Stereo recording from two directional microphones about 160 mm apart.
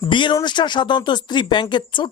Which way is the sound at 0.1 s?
30° left (ahead or behind).